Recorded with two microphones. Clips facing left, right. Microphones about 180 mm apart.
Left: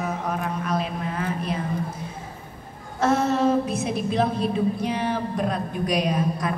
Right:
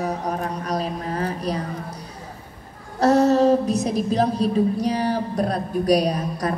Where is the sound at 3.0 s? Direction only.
40° right (ahead or behind).